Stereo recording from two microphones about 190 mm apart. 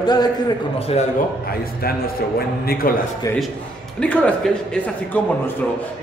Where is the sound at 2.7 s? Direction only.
50° left (ahead or behind).